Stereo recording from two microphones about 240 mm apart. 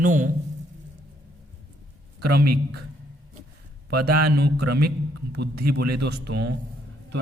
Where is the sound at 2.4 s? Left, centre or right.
Right.